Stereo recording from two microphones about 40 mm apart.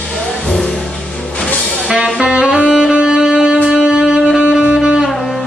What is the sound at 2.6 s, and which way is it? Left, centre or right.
Music, centre.